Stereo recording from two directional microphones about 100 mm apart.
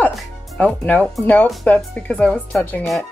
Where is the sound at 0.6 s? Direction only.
15° left (ahead or behind).